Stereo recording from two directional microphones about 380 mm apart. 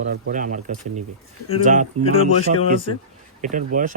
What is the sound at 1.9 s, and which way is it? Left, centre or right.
Speech, right.